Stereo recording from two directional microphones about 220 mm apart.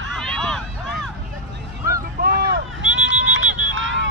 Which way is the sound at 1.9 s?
45° right (ahead or behind).